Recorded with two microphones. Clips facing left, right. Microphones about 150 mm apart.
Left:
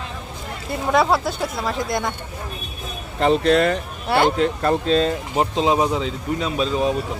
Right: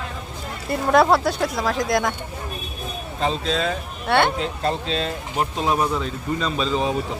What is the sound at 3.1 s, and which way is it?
Speech, 65° left (ahead or behind).